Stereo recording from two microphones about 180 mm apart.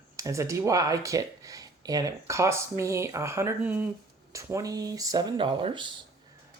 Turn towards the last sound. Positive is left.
turn(degrees=-30)  # may be behind; listen again after turning